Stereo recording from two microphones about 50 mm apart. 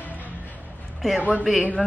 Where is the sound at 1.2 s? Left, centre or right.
Right.